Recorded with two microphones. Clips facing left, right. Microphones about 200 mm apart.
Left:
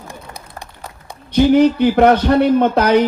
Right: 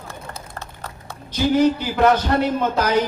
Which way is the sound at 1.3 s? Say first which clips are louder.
Left 6 dB; 60° left (ahead or behind).